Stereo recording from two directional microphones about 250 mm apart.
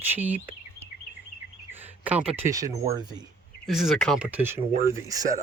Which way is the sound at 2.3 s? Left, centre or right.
Centre.